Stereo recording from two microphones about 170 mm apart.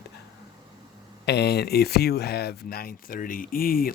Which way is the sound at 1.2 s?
75° left (ahead or behind).